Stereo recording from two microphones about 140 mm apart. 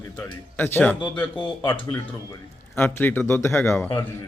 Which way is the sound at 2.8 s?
15° left (ahead or behind).